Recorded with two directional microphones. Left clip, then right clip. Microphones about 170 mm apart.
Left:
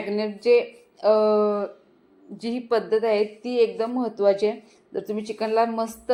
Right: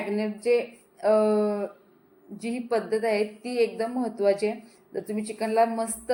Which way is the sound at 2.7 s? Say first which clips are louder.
Left 4 dB; 20° left (ahead or behind).